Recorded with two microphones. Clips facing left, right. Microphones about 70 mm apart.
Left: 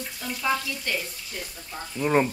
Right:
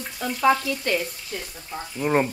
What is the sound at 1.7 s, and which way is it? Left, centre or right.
Speech, centre.